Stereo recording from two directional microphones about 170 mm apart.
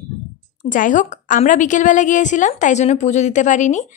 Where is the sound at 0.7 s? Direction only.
50° left (ahead or behind).